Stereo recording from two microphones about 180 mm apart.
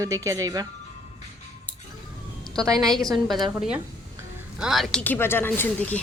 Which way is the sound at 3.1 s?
Centre (ahead or behind).